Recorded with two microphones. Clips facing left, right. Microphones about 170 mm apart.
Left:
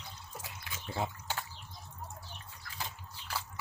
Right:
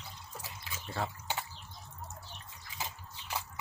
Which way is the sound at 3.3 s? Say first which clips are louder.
Right 1 dB; 15° right (ahead or behind).